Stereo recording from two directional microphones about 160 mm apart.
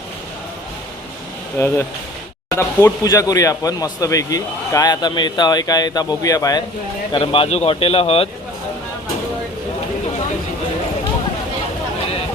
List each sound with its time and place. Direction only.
1.5 s speech: 15° left (ahead or behind); by 8.3 s 35° left (ahead or behind)